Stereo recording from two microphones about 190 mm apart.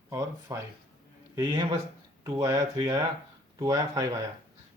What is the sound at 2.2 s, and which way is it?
Speech, 20° right (ahead or behind).